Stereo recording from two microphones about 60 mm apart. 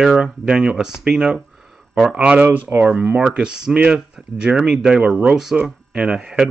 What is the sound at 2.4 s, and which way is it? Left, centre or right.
Speech, right.